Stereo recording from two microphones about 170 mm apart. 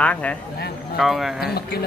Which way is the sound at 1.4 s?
70° left (ahead or behind).